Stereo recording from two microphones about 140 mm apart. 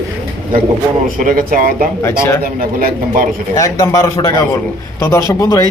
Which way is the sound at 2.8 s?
85° right.